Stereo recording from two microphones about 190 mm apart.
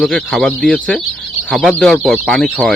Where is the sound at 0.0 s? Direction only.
Centre (ahead or behind).